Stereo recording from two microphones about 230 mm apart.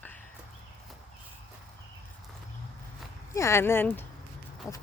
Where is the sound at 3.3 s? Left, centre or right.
Centre.